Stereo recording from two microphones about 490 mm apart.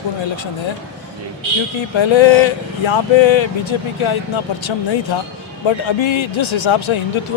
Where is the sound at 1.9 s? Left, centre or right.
Left.